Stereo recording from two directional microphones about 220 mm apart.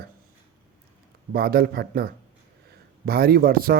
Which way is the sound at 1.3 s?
45° right (ahead or behind).